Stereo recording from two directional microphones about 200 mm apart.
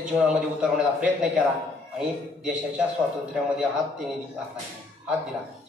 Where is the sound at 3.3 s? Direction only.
5° right (ahead or behind).